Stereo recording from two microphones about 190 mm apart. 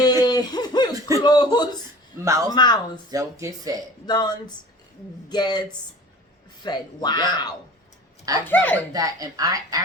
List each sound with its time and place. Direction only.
0.0 s a sound: 20° left (ahead or behind)
0.9 s a sound: 15° right (ahead or behind)
1.2 s speech: 20° left (ahead or behind)
3.1 s speech: 15° right (ahead or behind)
4.0 s speech: 20° left (ahead or behind)
8.4 s a child's voice: 10° left (ahead or behind)
8.9 s a woman's voice: 20° right (ahead or behind)